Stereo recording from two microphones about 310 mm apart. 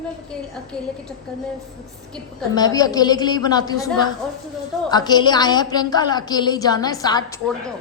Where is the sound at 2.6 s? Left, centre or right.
Centre.